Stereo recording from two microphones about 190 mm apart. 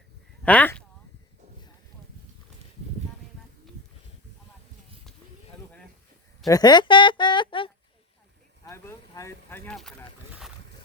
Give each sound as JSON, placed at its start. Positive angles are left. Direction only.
{"t": 0.4, "sound": "speech", "side_deg": 10}
{"t": 6.5, "sound": "speech", "side_deg": 20}
{"t": 8.6, "sound": "speech", "side_deg": 15}